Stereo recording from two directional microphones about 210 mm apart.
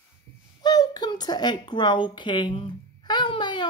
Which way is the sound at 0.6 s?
20° left (ahead or behind).